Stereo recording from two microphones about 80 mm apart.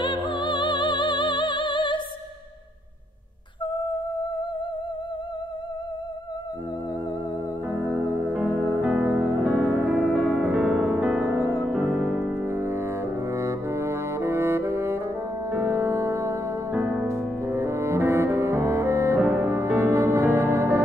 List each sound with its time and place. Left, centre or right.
0.0 s music: left
7.7 s music: right
10.1 s music: centre
11.5 s music: centre
12.4 s brass instrument: right
15.5 s music: right
16.7 s music: right